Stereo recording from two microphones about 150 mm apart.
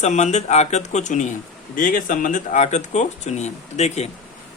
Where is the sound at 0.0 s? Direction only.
50° left (ahead or behind).